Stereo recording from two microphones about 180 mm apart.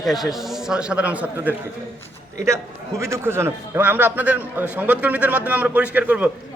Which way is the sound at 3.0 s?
15° right (ahead or behind).